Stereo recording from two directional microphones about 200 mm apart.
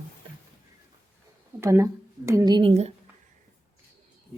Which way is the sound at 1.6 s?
15° right (ahead or behind).